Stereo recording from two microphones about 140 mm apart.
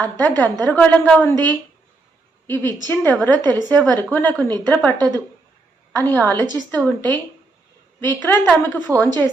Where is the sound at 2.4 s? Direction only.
15° left (ahead or behind).